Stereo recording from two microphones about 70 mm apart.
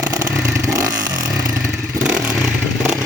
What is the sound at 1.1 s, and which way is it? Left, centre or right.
Motorcycle, right.